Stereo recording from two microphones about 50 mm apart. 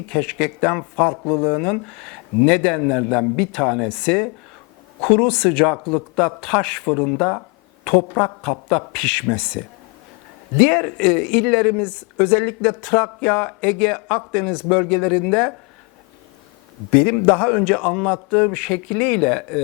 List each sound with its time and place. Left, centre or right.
0.1 s speech: centre
3.8 s speech: left
4.9 s speech: centre
10.6 s speech: centre
11.9 s speech: left; by 15.5 s centre
16.9 s speech: centre